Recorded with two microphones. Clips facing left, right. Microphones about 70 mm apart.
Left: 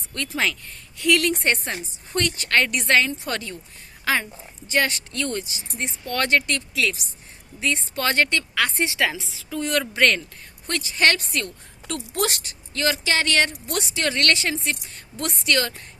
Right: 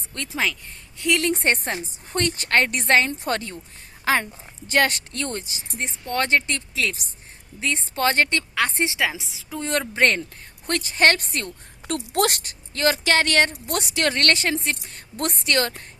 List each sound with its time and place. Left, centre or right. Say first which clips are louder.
0.9 s speech: left 2 dB; right
1.3 s a woman's voice: right 1 dB; right
4.7 s a woman's voice: right 2 dB; right
6.1 s a woman's voice: even; right
10.7 s a woman's voice: right 2 dB; right
12.1 s a woman's voice: right 3 dB; right